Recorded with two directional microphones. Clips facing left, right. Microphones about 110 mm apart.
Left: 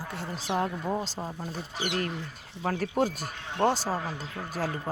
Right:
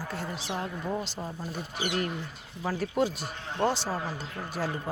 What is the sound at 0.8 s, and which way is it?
Speech, 25° left (ahead or behind).